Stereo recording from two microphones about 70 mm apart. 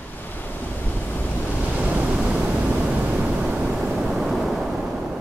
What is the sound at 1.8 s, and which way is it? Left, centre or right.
Waves, centre.